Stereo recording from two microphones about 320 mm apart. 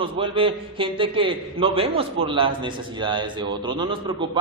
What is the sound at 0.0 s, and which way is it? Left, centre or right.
A man's voice, centre.